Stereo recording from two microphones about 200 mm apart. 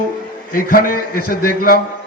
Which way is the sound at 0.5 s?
45° left (ahead or behind).